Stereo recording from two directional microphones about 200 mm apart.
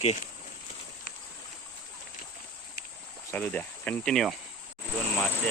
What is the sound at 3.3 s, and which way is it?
Speech, 10° left (ahead or behind).